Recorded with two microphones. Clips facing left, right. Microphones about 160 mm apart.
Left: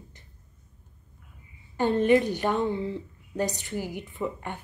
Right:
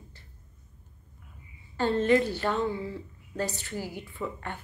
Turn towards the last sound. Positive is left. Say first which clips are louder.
# left 3 dB
turn(degrees=20)  # may be behind; listen again after turning